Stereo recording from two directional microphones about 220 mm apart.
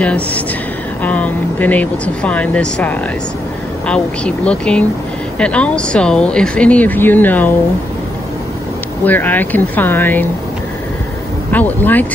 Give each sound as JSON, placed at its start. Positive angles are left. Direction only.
{"t": 0.0, "sound": "speech", "side_deg": 5}
{"t": 9.0, "sound": "speech", "side_deg": 10}
{"t": 11.5, "sound": "speech", "side_deg": 10}